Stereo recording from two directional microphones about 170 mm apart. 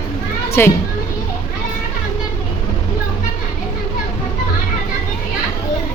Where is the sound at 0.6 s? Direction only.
15° left (ahead or behind).